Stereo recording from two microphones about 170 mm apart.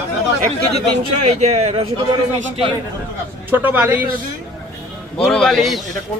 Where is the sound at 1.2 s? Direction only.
40° right (ahead or behind).